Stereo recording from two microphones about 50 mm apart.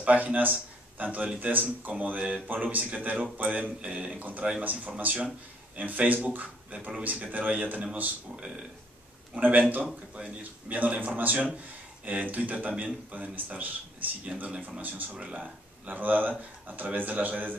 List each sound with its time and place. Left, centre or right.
0.0 s speech: right
3.8 s a man's voice: right
4.6 s speech: right
9.3 s a man's voice: right
14.8 s speech: right
15.1 s speech: right